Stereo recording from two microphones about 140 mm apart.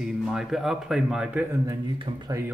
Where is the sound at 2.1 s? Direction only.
45° right (ahead or behind).